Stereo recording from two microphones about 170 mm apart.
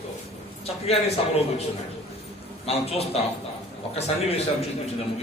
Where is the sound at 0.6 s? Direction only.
35° left (ahead or behind).